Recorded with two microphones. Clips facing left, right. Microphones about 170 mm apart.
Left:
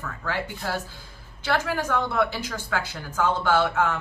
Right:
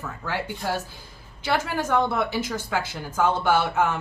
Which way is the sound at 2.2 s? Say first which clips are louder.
Even; 15° right (ahead or behind).